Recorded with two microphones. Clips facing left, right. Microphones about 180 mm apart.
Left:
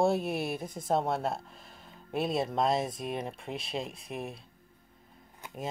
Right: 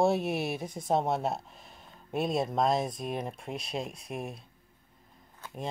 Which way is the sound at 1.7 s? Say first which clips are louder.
Right 1 dB; 50° right (ahead or behind).